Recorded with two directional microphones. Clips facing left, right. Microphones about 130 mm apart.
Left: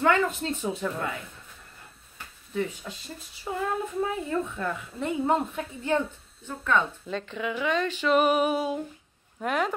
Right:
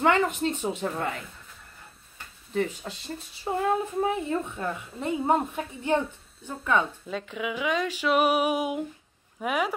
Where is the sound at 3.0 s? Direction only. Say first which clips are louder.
Right 5 dB; 30° right (ahead or behind).